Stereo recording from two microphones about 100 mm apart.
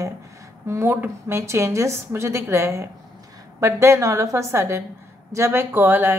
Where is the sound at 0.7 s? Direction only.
20° right (ahead or behind).